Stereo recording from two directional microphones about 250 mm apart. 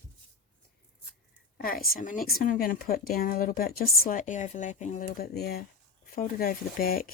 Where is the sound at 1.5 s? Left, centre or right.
Left.